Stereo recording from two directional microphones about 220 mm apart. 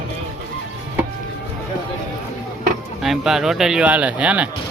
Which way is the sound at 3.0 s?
Centre (ahead or behind).